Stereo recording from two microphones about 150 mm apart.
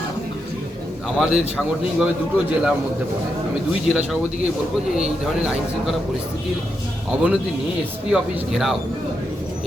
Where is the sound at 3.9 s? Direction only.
5° right (ahead or behind).